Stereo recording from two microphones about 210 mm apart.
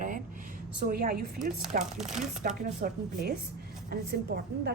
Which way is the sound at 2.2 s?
40° right (ahead or behind).